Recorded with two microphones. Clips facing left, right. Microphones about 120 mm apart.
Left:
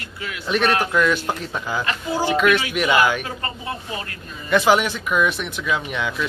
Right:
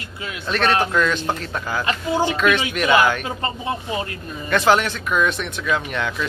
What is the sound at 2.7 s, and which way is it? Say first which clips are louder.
Speech: right 2 dB; 15° left (ahead or behind).